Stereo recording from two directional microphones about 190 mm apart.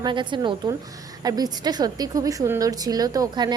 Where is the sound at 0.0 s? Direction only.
25° right (ahead or behind).